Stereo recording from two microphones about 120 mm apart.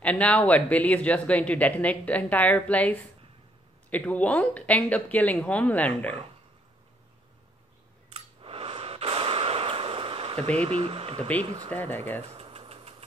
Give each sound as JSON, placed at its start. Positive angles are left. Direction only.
{"t": 0.0, "sound": "speech", "side_deg": 10}
{"t": 8.1, "sound": "a sound", "side_deg": -50}
{"t": 11.4, "sound": "speech", "side_deg": -40}
{"t": 11.7, "sound": "speech", "side_deg": 15}
{"t": 12.3, "sound": "engine", "side_deg": -55}